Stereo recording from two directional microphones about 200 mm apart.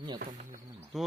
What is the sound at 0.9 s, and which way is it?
Speech, centre (ahead or behind).